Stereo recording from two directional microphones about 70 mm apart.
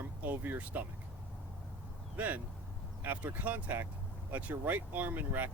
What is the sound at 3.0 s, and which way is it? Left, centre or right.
Speech, right.